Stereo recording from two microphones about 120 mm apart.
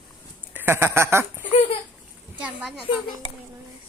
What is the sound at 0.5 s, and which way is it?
Speech, 20° right (ahead or behind).